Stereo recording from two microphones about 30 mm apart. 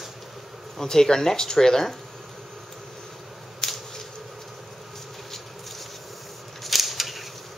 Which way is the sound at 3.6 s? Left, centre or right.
Centre.